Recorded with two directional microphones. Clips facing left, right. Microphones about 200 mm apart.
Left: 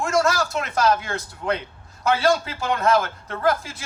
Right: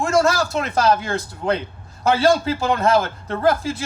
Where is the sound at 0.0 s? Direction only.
30° right (ahead or behind).